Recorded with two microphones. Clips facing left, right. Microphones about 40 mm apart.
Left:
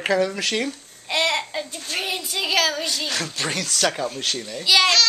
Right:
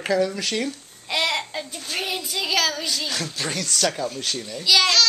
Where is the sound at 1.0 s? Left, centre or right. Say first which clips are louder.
Left 2 dB; centre.